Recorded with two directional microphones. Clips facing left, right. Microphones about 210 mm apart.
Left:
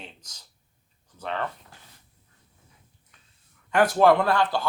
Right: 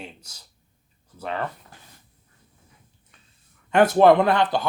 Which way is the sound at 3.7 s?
25° right (ahead or behind).